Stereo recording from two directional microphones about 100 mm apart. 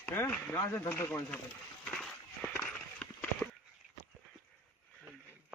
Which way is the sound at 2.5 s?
15° left (ahead or behind).